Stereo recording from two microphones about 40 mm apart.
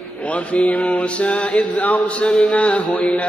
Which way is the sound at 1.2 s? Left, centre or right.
Left.